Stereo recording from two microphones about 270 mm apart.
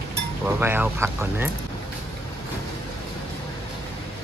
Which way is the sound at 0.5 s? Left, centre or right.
Centre.